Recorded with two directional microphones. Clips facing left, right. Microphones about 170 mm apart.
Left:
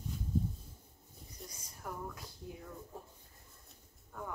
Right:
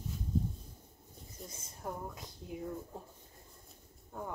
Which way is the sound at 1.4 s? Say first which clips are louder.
Right 3 dB; 25° right (ahead or behind).